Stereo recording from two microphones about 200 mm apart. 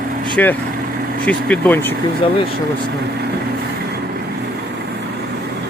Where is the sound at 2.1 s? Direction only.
25° left (ahead or behind).